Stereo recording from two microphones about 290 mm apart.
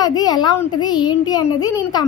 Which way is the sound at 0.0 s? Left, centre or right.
Centre.